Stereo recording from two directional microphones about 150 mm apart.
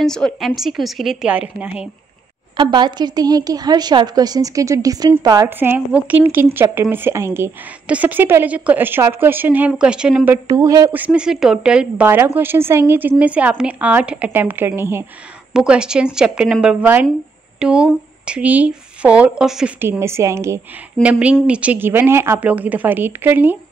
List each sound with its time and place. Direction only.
0.0 s speech: 5° left (ahead or behind)
2.5 s a woman's voice: 30° right (ahead or behind)
5.6 s speech: 10° right (ahead or behind)
10.5 s a woman's voice: 25° right (ahead or behind)
10.9 s speech: 10° right (ahead or behind)
19.8 s speech: 15° right (ahead or behind)